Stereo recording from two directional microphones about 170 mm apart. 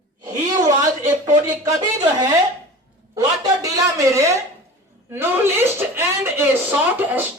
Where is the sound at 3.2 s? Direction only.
20° right (ahead or behind).